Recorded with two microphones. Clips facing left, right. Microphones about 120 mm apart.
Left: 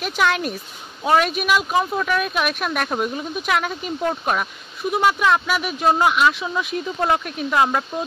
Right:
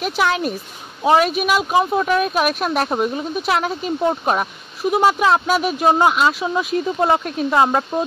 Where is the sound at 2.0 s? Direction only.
35° right (ahead or behind).